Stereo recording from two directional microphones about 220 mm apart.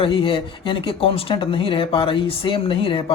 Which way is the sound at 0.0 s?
25° left (ahead or behind).